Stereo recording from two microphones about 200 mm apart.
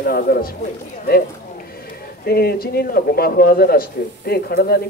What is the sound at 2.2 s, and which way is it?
Speech, 50° left (ahead or behind).